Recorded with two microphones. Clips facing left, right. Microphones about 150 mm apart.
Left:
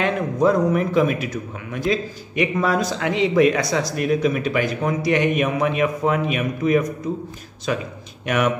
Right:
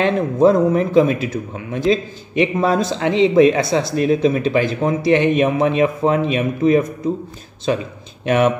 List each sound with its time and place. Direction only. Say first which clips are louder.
0.0 s speech: right 5 dB; 30° right (ahead or behind)